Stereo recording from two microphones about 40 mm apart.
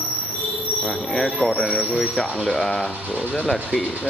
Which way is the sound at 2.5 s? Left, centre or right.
Centre.